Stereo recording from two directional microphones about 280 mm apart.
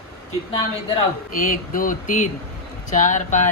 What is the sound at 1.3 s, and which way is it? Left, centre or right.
Speech, left.